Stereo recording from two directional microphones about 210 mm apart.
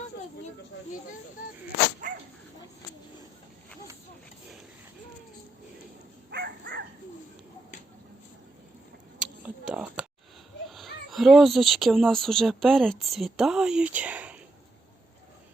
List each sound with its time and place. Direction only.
2.0 s dog: 40° right (ahead or behind)
6.3 s dog: 50° right (ahead or behind)
9.1 s a sound: 5° right (ahead or behind)
10.7 s speech: centre (ahead or behind)